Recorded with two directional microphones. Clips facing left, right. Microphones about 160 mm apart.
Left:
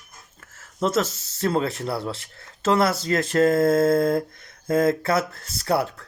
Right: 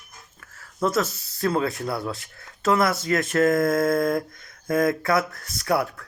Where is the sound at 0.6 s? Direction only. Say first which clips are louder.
Left 1 dB; 25° left (ahead or behind).